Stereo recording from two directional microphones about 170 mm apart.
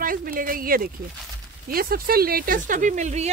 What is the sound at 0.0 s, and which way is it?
Speech, 55° right (ahead or behind).